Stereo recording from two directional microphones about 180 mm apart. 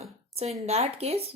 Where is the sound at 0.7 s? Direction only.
35° right (ahead or behind).